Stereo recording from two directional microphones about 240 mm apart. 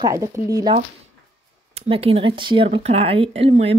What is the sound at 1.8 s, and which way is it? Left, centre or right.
Speech, right.